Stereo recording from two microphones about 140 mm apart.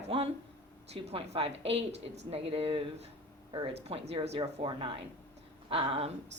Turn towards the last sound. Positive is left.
turn(degrees=-45)  # may be behind; listen again after turning